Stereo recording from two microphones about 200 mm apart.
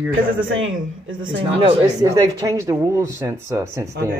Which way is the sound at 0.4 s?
80° right.